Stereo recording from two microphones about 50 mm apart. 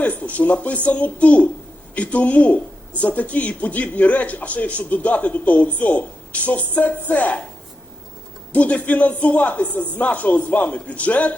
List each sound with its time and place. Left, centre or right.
0.0 s speech: left
8.5 s speech: left